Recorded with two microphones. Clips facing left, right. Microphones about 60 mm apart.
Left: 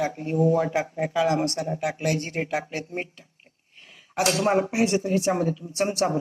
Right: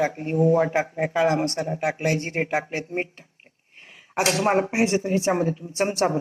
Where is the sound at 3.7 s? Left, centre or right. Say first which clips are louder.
Right 3 dB; right.